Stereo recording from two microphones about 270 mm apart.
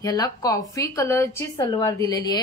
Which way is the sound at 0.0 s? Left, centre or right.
Centre.